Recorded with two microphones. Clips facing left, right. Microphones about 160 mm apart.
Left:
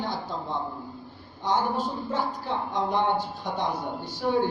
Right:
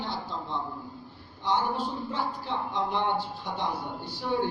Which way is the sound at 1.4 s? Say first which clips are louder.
Left 2 dB; 45° left (ahead or behind).